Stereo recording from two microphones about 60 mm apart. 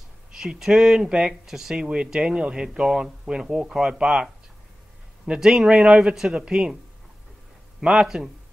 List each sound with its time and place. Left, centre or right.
0.4 s speech: centre
7.9 s speech: centre